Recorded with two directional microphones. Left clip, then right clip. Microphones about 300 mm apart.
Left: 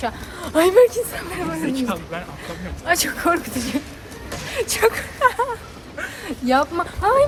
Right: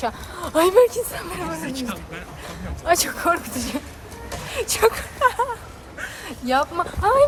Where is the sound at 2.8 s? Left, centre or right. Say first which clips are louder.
Even; centre.